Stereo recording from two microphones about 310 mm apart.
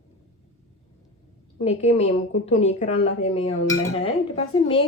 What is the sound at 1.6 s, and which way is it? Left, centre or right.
A woman's voice, centre.